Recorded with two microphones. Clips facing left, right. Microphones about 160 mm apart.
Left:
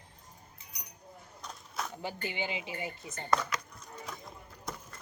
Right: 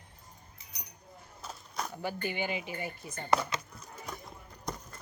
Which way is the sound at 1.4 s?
Centre (ahead or behind).